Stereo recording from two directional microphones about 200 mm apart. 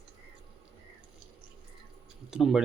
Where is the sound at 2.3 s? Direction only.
Centre (ahead or behind).